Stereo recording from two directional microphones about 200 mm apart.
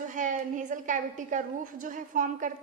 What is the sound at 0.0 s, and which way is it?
A woman's voice, 40° right (ahead or behind).